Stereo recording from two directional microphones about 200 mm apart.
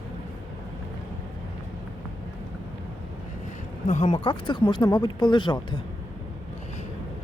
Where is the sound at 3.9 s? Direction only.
35° left (ahead or behind).